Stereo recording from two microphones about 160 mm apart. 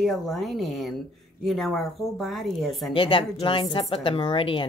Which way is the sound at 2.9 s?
30° left (ahead or behind).